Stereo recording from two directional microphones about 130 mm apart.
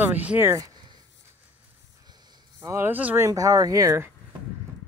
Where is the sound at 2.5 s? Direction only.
20° right (ahead or behind).